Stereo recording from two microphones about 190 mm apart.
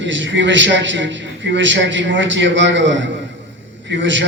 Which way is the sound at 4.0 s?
70° right (ahead or behind).